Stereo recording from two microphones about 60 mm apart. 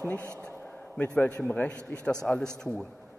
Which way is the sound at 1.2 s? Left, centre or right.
Left.